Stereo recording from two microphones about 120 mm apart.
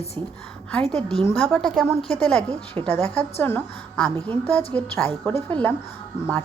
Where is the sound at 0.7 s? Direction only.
10° left (ahead or behind).